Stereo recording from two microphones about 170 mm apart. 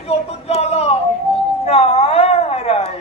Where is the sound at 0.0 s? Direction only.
35° left (ahead or behind).